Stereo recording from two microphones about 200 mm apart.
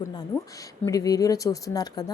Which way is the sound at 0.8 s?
15° left (ahead or behind).